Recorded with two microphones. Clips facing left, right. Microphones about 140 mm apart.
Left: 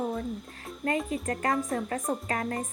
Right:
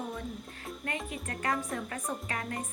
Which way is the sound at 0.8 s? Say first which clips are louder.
Left 10 dB; 35° left (ahead or behind).